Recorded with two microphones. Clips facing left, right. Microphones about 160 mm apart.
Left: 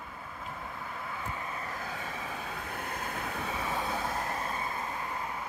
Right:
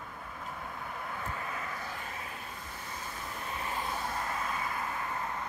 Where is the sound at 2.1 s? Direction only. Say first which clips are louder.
Left 4 dB; 85° left; by 4.4 s 55° left (ahead or behind).